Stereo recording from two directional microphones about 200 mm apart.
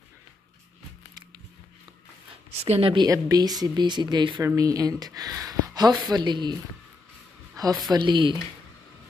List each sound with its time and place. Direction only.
2.6 s speech: 30° right (ahead or behind)
7.6 s a sound: 20° right (ahead or behind)
7.9 s speech: 20° right (ahead or behind)